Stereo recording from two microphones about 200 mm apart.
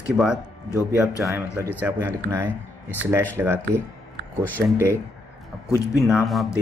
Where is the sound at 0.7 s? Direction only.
15° left (ahead or behind).